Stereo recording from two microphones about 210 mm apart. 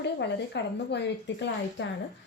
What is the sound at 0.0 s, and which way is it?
A woman's voice, 55° left (ahead or behind).